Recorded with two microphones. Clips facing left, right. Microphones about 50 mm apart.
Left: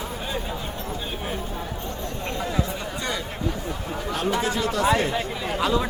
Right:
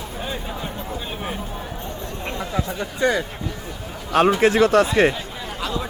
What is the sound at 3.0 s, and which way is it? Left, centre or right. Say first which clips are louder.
Speech: right 11 dB; right.